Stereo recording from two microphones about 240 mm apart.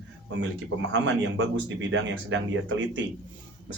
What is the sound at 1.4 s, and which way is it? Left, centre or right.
Speech, right.